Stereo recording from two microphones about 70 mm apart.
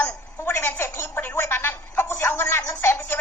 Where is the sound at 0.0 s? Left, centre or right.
Left.